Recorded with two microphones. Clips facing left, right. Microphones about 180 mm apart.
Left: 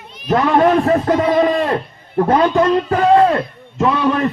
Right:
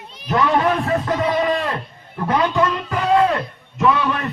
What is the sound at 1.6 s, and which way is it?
A man's voice, 55° left (ahead or behind).